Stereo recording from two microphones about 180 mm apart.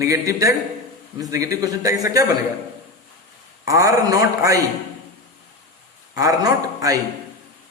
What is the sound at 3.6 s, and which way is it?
Speech, 20° right (ahead or behind).